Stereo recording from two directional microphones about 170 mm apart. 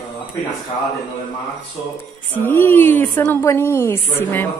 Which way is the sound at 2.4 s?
10° left (ahead or behind).